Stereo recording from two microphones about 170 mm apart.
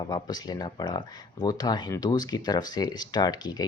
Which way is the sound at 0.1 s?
25° left (ahead or behind).